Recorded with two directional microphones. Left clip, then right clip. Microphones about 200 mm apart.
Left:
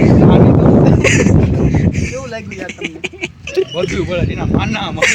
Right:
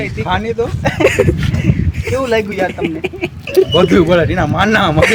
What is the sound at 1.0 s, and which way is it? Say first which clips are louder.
Speech: right 2 dB; 20° left (ahead or behind).